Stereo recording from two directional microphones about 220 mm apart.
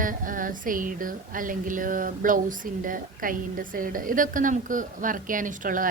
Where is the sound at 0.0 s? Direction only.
35° right (ahead or behind).